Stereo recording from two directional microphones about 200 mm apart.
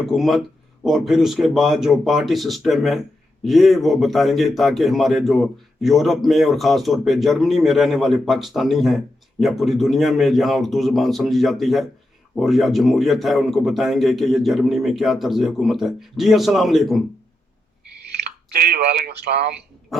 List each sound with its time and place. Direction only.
0.0 s speech: centre (ahead or behind)
18.5 s speech: 50° right (ahead or behind)